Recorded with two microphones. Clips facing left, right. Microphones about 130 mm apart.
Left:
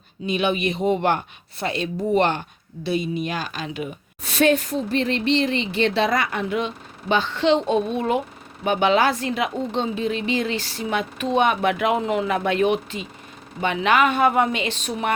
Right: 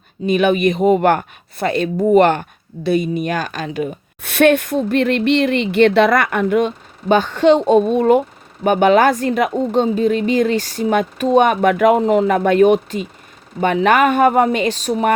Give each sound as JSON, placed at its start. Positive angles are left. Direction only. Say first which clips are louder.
{"t": 0.3, "sound": "a woman's voice", "louder": "right 8 dB", "side_deg": -50}
{"t": 4.2, "sound": "a woman's voice", "louder": "right 6 dB", "side_deg": -60}